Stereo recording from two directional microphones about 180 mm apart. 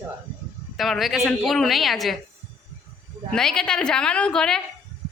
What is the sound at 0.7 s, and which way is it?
Speech, centre (ahead or behind).